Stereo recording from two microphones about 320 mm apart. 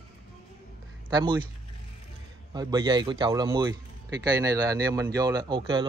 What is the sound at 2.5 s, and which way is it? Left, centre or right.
A man's voice, centre.